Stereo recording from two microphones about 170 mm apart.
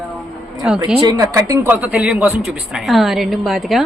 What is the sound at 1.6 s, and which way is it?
A woman's voice, 10° right (ahead or behind).